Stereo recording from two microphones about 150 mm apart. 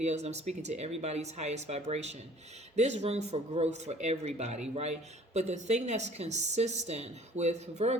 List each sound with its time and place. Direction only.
0.0 s speech: 50° right (ahead or behind)